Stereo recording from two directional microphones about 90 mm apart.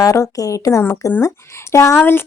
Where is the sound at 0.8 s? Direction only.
25° left (ahead or behind).